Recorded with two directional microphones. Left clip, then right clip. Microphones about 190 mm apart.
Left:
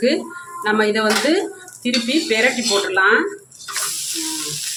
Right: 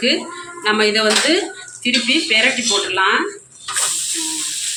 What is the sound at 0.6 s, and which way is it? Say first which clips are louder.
Speech: right 2 dB; 35° left (ahead or behind).